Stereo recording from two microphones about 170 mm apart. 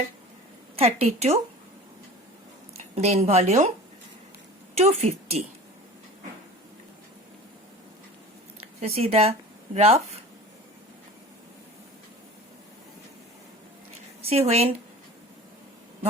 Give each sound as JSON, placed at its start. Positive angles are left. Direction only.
{"t": 0.8, "sound": "speech", "side_deg": -35}
{"t": 2.9, "sound": "speech", "side_deg": -40}
{"t": 4.8, "sound": "speech", "side_deg": -35}
{"t": 9.0, "sound": "speech", "side_deg": -35}
{"t": 14.2, "sound": "speech", "side_deg": -35}